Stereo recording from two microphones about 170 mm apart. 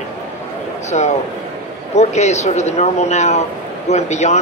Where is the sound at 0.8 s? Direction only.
40° left (ahead or behind).